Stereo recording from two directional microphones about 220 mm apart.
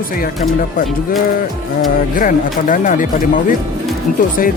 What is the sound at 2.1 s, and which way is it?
Speech, 35° left (ahead or behind).